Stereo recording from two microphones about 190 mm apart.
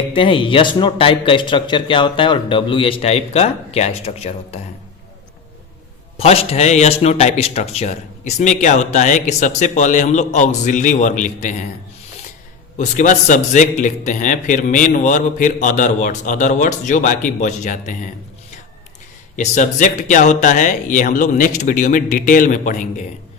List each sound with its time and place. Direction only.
0.1 s speech: 25° left (ahead or behind)
6.1 s a man's voice: 30° left (ahead or behind)
12.7 s a man's voice: 40° left (ahead or behind)
19.4 s a man's voice: 40° left (ahead or behind)